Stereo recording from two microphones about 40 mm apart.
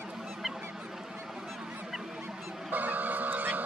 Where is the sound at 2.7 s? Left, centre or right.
Right.